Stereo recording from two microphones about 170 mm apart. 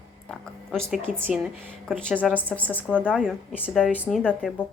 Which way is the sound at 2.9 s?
5° right (ahead or behind).